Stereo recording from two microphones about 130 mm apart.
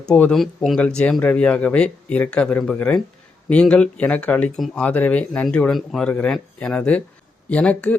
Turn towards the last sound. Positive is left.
turn(degrees=10)  # may be behind; listen again after turning